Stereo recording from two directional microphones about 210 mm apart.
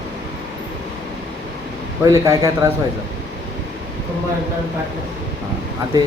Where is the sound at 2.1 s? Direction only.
15° right (ahead or behind).